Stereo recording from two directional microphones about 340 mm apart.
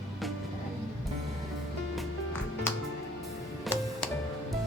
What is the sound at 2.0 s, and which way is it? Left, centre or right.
Music, centre.